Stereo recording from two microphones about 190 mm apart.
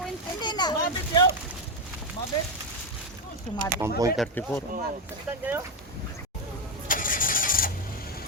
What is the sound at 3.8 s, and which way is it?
Speech, 15° right (ahead or behind).